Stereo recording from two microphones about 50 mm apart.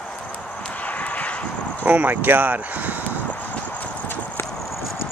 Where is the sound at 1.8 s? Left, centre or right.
Right.